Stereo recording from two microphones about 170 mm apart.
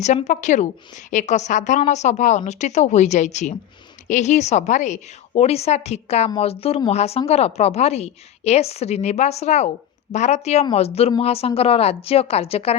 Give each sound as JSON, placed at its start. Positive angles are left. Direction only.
{"t": 0.0, "sound": "a woman's voice", "side_deg": 40}